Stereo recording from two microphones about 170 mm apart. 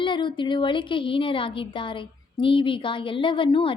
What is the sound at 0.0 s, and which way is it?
A woman's voice, 30° left (ahead or behind).